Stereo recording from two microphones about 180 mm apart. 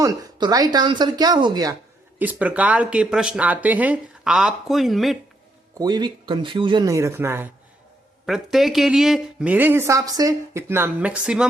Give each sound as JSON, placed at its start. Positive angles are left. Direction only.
{"t": 0.0, "sound": "speech", "side_deg": -20}
{"t": 2.1, "sound": "speech", "side_deg": -10}
{"t": 5.8, "sound": "speech", "side_deg": -25}
{"t": 8.3, "sound": "speech", "side_deg": 0}